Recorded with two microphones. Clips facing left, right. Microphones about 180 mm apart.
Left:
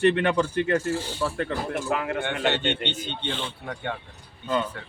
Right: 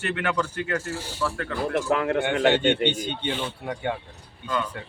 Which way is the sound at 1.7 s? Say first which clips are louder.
Right 6 dB; 65° right (ahead or behind).